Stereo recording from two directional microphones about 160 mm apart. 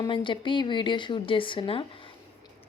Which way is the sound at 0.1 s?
30° left (ahead or behind).